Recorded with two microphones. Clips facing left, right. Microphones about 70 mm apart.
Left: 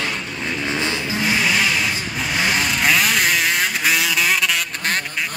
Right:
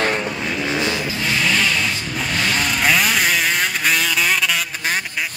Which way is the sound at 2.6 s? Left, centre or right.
Centre.